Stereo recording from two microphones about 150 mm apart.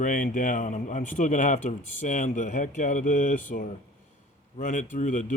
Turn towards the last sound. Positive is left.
turn(degrees=55)  # may be behind; listen again after turning